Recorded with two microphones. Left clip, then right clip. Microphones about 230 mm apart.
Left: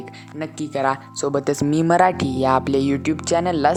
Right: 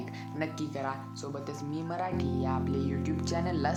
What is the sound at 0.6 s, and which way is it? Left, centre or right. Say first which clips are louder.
Speech: left 14 dB; left.